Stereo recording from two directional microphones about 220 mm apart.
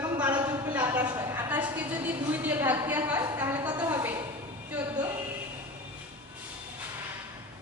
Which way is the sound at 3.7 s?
15° right (ahead or behind).